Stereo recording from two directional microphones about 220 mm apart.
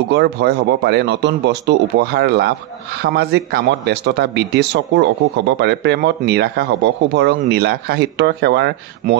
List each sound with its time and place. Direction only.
0.1 s speech: 50° right (ahead or behind)